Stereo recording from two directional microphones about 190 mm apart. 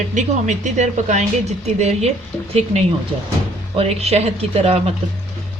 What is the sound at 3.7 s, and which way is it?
A woman's voice, 35° right (ahead or behind).